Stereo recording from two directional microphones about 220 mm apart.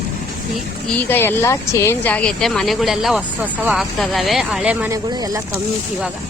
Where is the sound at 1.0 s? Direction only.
10° left (ahead or behind); by 5.6 s 15° right (ahead or behind).